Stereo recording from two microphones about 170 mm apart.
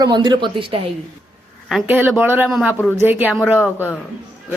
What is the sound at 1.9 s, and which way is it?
A woman's voice, 10° right (ahead or behind).